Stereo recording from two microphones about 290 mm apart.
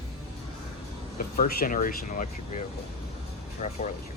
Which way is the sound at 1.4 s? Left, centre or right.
Left.